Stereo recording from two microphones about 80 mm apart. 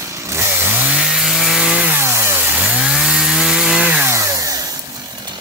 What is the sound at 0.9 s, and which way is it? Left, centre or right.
Chainsaw, centre.